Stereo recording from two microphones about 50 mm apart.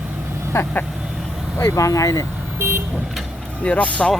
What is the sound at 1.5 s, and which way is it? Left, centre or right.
Speech, left.